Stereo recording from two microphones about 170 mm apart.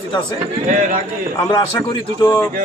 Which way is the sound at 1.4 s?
25° left (ahead or behind).